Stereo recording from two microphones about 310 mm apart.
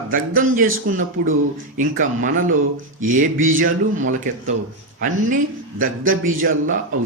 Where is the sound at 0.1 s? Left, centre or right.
Right.